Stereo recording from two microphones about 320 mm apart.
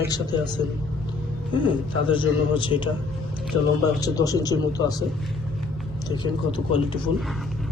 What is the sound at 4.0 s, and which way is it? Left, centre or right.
Speech, centre.